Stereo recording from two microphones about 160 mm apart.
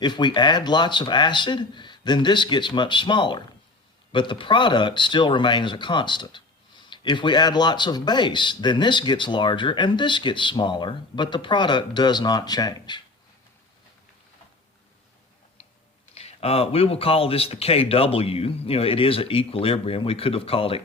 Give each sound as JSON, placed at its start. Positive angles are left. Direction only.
{"t": 0.0, "sound": "speech", "side_deg": 30}
{"t": 16.1, "sound": "speech", "side_deg": 40}